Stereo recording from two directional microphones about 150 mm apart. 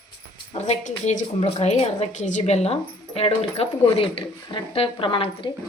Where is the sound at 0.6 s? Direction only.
50° left (ahead or behind); by 5.5 s 35° left (ahead or behind).